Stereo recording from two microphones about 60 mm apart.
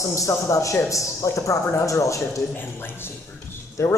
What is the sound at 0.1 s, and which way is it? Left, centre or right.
Speech, left.